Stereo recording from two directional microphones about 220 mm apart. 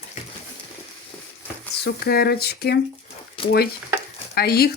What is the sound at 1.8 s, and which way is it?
Speech, 45° left (ahead or behind).